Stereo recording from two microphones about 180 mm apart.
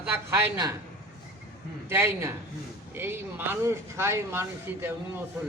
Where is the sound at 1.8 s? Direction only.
15° right (ahead or behind).